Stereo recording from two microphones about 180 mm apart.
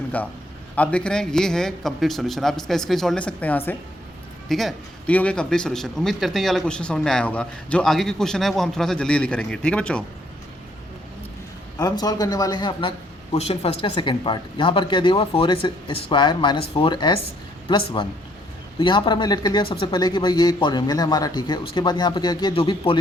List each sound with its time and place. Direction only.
0.1 s a man's voice: 10° left (ahead or behind)
11.8 s speech: 20° left (ahead or behind)